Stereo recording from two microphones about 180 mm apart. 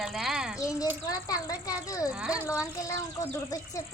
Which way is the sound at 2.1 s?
5° right (ahead or behind).